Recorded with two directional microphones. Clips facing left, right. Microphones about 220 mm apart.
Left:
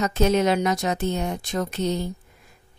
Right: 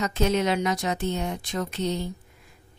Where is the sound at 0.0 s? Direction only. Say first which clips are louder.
Left 4 dB; 45° left (ahead or behind).